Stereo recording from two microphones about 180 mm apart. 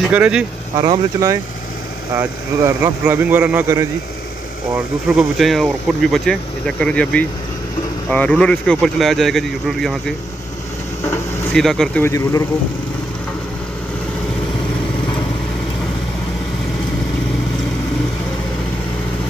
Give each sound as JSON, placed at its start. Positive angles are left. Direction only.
{"t": 0.1, "sound": "speech", "side_deg": -5}
{"t": 0.7, "sound": "speech", "side_deg": -25}
{"t": 11.1, "sound": "a sound", "side_deg": 5}
{"t": 12.0, "sound": "speech", "side_deg": 15}